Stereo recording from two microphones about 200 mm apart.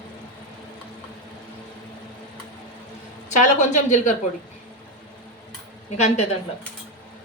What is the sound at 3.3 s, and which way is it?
Speech, 40° left (ahead or behind).